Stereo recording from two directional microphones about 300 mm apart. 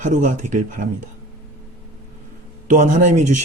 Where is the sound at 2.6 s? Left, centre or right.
Right.